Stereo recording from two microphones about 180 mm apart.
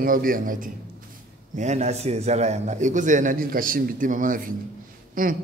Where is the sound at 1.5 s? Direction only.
40° right (ahead or behind).